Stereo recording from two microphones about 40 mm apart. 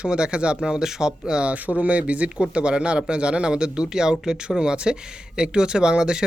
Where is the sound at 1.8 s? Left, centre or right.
Right.